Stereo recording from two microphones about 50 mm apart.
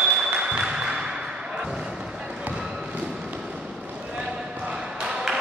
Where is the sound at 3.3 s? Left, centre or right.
Centre.